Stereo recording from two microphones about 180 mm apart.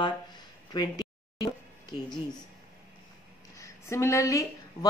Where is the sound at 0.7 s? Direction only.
20° left (ahead or behind).